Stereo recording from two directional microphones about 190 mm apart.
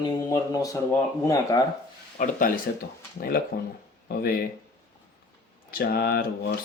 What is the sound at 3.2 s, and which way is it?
Speech, 50° left (ahead or behind).